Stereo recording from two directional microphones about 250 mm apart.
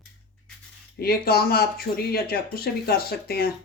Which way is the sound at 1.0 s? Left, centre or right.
Left.